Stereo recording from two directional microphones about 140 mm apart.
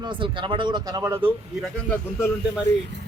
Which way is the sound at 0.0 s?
35° right (ahead or behind).